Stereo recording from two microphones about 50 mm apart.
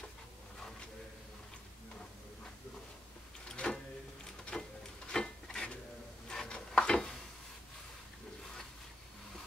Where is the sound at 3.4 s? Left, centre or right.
Centre.